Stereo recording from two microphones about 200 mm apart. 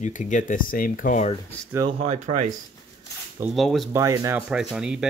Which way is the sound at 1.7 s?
15° right (ahead or behind).